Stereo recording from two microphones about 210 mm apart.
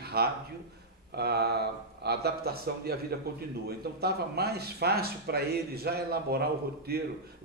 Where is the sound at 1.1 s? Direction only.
50° right (ahead or behind).